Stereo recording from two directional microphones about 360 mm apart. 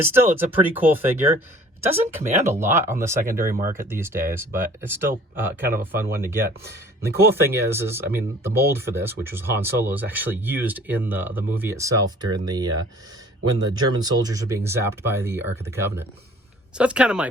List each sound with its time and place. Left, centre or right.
0.0 s speech: centre
3.5 s speech: right
3.8 s speech: centre
13.8 s speech: centre